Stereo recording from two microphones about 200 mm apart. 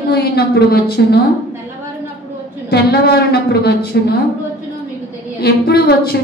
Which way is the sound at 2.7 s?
50° left (ahead or behind).